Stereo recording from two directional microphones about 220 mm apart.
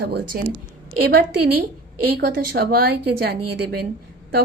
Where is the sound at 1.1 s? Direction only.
45° right (ahead or behind).